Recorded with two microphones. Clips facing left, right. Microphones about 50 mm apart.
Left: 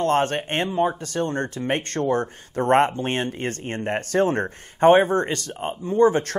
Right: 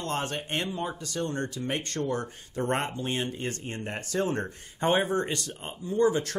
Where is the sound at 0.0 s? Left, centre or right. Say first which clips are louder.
Left 11 dB; left.